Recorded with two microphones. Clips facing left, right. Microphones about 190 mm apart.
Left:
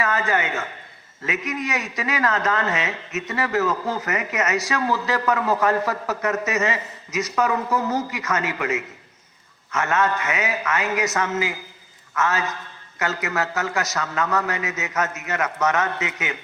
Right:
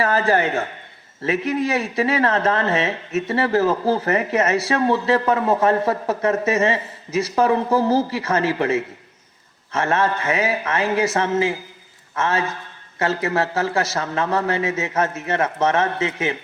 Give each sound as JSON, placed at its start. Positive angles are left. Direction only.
{"t": 0.0, "sound": "a man's voice", "side_deg": -35}